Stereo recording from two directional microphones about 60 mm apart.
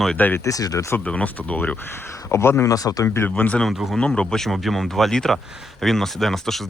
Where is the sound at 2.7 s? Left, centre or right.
Left.